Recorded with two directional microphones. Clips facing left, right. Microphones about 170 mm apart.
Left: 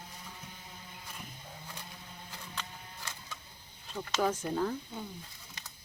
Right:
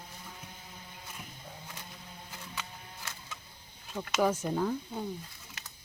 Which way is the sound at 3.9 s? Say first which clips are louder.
Right 3 dB; 10° right (ahead or behind).